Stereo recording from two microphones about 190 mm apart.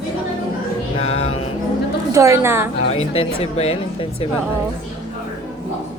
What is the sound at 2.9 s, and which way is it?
Speech, 30° left (ahead or behind).